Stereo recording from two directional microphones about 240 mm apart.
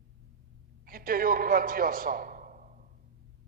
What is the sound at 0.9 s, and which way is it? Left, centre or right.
A man's voice, right.